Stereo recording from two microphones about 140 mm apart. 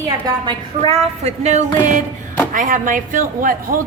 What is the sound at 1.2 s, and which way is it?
Speech, 55° right (ahead or behind).